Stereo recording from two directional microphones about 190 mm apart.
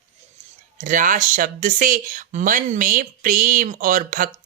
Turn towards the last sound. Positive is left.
turn(degrees=-45)  # may be behind; listen again after turning